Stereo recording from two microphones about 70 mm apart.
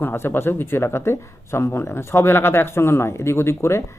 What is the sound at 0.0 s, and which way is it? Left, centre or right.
Speech, left.